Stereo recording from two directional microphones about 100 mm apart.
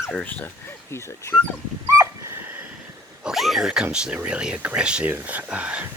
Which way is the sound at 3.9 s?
10° right (ahead or behind).